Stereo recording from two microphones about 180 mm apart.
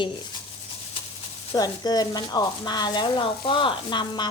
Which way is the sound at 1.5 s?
20° left (ahead or behind).